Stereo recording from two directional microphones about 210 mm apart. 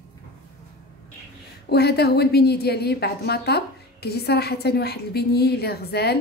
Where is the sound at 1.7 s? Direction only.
50° left (ahead or behind).